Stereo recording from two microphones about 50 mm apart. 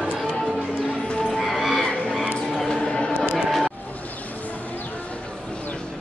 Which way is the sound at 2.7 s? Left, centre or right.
Centre.